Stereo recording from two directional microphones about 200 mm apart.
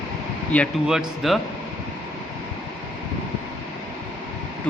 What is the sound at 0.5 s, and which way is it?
Speech, centre (ahead or behind).